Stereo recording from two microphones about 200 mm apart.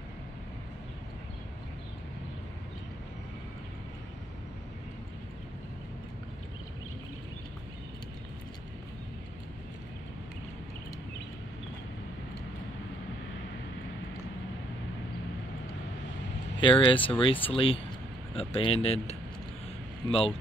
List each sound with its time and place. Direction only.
16.5 s speech: 25° left (ahead or behind)